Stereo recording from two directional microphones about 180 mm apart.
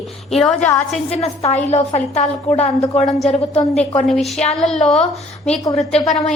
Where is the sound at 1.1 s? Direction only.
35° left (ahead or behind).